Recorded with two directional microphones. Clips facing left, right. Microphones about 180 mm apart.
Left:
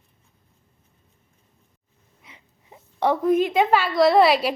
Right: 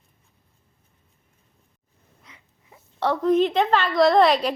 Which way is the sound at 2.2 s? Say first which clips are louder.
Left 3 dB; 20° left (ahead or behind).